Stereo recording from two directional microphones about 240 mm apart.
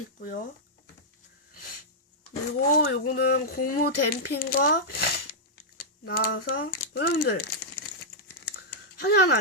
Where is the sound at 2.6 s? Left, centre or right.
Left.